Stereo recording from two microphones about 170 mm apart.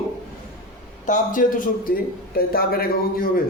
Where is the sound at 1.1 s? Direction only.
50° left (ahead or behind).